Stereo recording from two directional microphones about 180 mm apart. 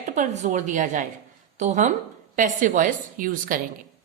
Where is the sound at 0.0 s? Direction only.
45° right (ahead or behind).